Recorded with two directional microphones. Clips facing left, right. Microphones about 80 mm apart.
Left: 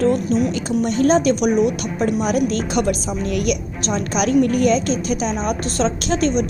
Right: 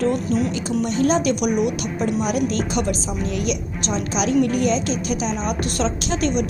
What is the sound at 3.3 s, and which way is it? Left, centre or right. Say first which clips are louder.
Speech: left 4 dB; left.